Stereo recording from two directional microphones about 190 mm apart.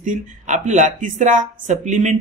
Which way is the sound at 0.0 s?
40° right (ahead or behind).